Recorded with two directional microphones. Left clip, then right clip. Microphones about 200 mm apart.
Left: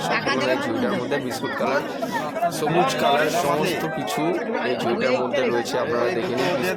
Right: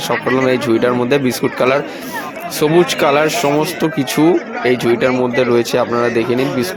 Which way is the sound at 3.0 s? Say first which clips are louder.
Right 7 dB; 40° right (ahead or behind).